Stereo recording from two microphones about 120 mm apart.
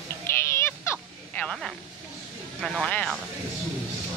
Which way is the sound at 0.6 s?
20° left (ahead or behind).